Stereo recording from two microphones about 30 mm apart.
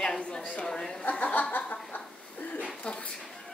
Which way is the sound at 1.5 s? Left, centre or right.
Left.